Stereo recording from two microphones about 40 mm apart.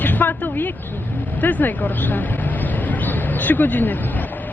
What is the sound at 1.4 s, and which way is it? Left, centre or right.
Speech, left.